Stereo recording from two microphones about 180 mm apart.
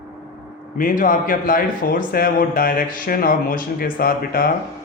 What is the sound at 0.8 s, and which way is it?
A man's voice, 50° left (ahead or behind).